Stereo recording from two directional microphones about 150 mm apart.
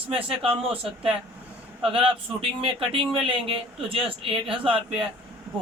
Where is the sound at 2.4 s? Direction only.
35° right (ahead or behind).